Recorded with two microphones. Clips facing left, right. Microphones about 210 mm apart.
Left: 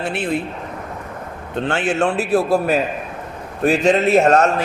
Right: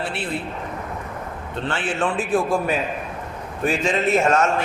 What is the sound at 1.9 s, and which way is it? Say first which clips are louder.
Speech: left 4 dB; 40° left (ahead or behind).